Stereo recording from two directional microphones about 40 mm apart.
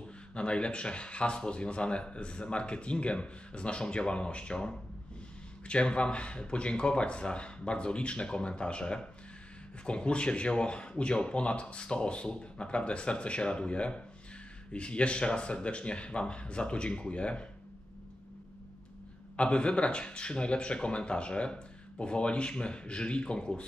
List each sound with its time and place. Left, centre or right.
0.3 s speech: left
19.3 s speech: left